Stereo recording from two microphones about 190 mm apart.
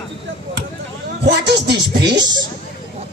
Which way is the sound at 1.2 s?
65° right (ahead or behind).